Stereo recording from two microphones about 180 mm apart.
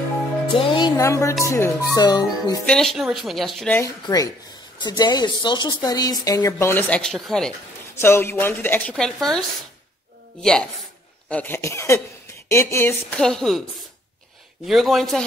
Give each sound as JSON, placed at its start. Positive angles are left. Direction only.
{"t": 0.6, "sound": "speech", "side_deg": 25}
{"t": 2.6, "sound": "speech", "side_deg": 5}
{"t": 7.9, "sound": "speech", "side_deg": 15}
{"t": 10.4, "sound": "speech", "side_deg": 5}